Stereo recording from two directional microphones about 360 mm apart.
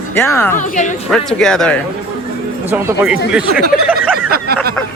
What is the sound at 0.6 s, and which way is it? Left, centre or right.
Speech, left.